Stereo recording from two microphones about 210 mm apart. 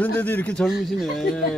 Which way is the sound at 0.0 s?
10° left (ahead or behind).